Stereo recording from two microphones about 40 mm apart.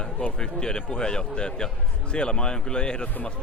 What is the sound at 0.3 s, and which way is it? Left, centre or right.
A man's voice, centre.